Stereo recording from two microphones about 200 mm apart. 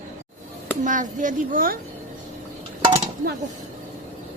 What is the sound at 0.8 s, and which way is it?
Speech, 40° right (ahead or behind).